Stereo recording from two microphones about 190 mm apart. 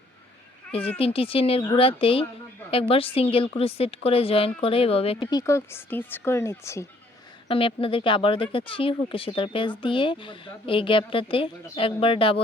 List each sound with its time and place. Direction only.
0.9 s speech: 30° left (ahead or behind); by 6.8 s 15° left (ahead or behind)
7.4 s speech: 30° left (ahead or behind)